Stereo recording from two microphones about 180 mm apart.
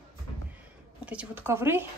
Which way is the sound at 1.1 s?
10° right (ahead or behind).